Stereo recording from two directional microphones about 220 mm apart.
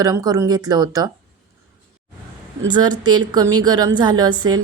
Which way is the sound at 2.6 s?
20° right (ahead or behind).